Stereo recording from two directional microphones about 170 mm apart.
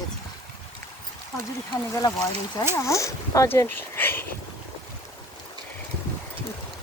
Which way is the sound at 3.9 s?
10° left (ahead or behind).